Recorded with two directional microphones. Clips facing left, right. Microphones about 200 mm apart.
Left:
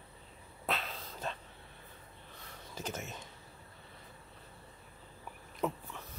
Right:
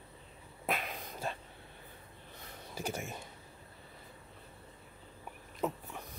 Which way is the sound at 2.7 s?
10° right (ahead or behind).